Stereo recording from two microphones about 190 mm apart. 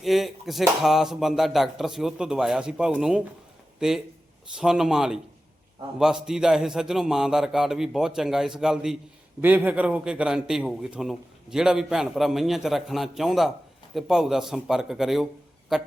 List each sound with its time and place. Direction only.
0.0 s a man's voice: centre (ahead or behind)